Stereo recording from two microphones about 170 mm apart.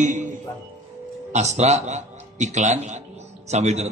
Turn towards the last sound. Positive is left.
turn(degrees=-40)  # may be behind; listen again after turning